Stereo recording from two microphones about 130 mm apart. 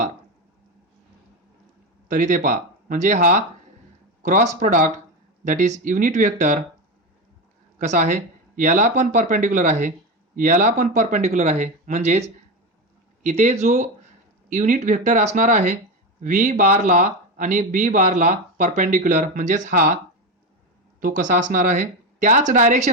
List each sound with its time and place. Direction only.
2.0 s speech: 75° right (ahead or behind)
7.8 s speech: 70° right (ahead or behind)
10.3 s speech: 90° right
21.0 s speech: 80° right